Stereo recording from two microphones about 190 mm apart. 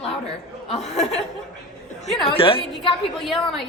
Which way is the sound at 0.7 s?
35° left (ahead or behind).